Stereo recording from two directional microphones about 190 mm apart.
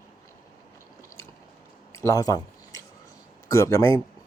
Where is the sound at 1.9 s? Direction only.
15° left (ahead or behind).